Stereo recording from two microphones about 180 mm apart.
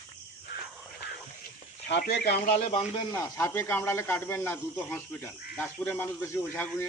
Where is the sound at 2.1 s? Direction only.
65° left (ahead or behind).